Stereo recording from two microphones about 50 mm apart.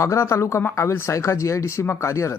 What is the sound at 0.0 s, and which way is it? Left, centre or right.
Speech, left.